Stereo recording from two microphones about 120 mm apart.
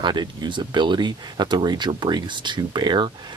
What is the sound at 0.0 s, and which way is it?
Speech, 40° right (ahead or behind).